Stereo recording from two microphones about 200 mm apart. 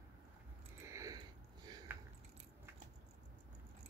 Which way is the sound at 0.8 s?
15° right (ahead or behind).